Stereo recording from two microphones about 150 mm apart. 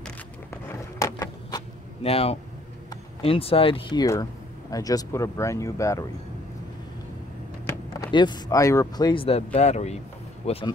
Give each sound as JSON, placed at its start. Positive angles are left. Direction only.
{"t": 0.5, "sound": "a sound", "side_deg": 20}
{"t": 2.0, "sound": "speech", "side_deg": 40}
{"t": 4.0, "sound": "speech", "side_deg": 25}
{"t": 7.6, "sound": "speech", "side_deg": 25}